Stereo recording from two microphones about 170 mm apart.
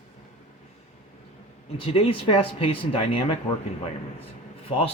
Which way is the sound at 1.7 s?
35° left (ahead or behind).